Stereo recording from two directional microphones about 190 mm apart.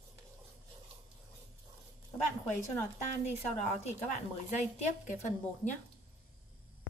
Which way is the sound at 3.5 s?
35° left (ahead or behind).